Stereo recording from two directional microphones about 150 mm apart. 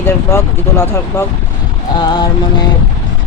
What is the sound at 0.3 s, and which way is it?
Speech, 20° left (ahead or behind).